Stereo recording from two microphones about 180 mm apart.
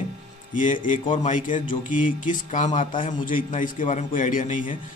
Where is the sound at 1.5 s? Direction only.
45° left (ahead or behind).